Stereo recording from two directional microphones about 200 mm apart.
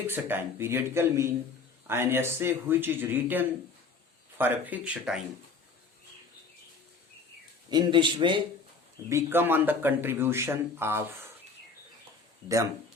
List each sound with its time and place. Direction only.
0.1 s speech: 10° right (ahead or behind)
7.7 s a man's voice: 20° right (ahead or behind)
9.0 s speech: 10° right (ahead or behind)